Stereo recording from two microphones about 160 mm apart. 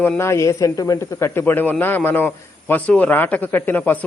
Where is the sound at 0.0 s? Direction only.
15° left (ahead or behind).